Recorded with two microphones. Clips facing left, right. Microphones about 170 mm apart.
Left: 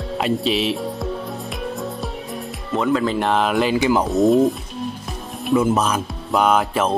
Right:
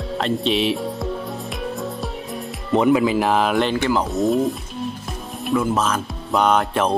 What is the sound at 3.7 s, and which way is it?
Speech, 15° left (ahead or behind).